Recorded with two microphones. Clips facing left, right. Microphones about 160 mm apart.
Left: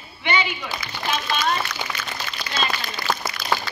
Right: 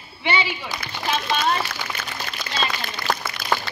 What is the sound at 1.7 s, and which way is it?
Speech, 55° right (ahead or behind).